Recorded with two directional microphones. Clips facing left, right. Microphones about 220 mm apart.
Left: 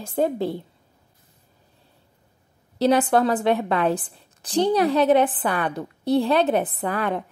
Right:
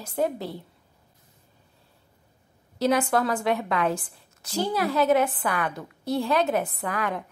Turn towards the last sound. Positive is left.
turn(degrees=30)  # may be behind; listen again after turning